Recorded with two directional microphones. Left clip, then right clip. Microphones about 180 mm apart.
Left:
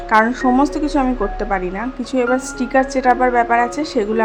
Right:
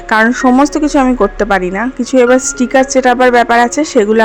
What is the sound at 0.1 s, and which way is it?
Speech, 35° right (ahead or behind).